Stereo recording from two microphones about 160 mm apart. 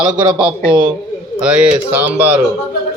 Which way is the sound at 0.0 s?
25° right (ahead or behind).